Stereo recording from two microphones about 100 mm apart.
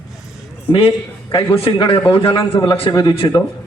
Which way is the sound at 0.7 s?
70° left (ahead or behind).